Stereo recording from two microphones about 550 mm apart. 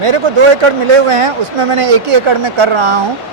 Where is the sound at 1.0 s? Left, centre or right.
Right.